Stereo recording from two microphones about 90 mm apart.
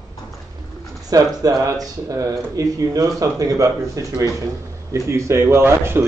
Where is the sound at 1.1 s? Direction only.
40° right (ahead or behind).